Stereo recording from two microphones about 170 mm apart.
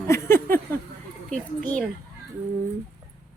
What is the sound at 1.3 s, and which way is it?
Speech, 5° left (ahead or behind).